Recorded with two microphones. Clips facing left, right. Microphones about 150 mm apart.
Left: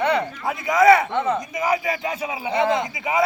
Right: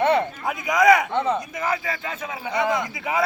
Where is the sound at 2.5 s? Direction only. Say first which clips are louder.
Left 2 dB; 25° left (ahead or behind).